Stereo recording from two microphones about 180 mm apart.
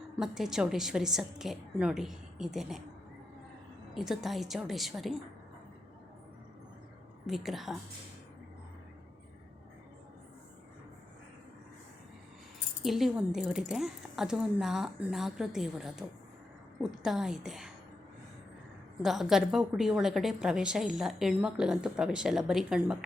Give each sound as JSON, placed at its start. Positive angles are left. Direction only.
{"t": 0.2, "sound": "a woman's voice", "side_deg": 0}
{"t": 3.9, "sound": "a woman's voice", "side_deg": 0}
{"t": 7.3, "sound": "a woman's voice", "side_deg": 0}
{"t": 12.8, "sound": "a woman's voice", "side_deg": 0}
{"t": 19.0, "sound": "a woman's voice", "side_deg": 0}